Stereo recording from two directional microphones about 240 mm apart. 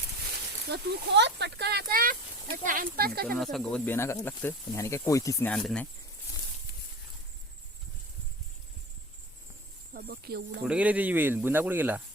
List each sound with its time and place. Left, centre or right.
0.7 s speech: right
3.3 s speech: centre
9.9 s speech: right
10.6 s speech: centre